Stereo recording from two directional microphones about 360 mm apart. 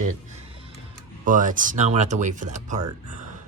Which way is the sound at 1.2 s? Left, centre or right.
Right.